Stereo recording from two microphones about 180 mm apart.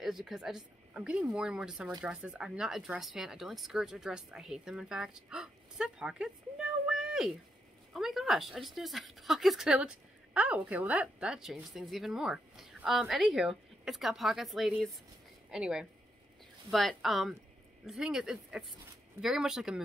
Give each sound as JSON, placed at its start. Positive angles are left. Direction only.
{"t": 0.0, "sound": "speech", "side_deg": 0}